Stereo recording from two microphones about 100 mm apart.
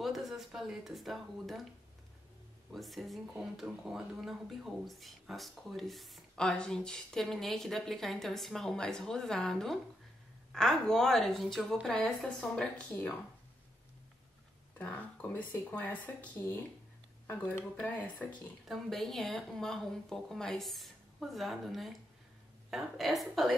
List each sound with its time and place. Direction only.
0.0 s speech: 5° right (ahead or behind)
2.7 s speech: centre (ahead or behind)
14.8 s speech: 15° left (ahead or behind)
18.7 s speech: centre (ahead or behind)